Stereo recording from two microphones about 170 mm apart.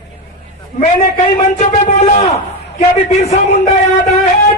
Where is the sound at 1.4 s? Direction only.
40° left (ahead or behind).